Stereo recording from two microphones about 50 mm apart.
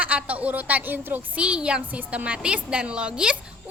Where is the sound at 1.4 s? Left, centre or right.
Right.